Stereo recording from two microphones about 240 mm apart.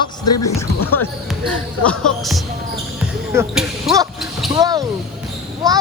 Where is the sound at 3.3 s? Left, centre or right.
Centre.